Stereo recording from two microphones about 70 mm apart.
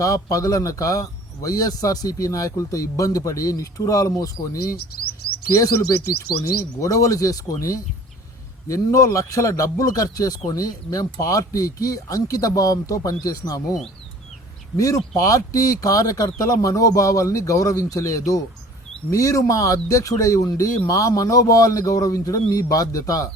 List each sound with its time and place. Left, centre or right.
0.0 s a man's voice: left
6.3 s speech: left
6.8 s a man's voice: left
14.8 s speech: left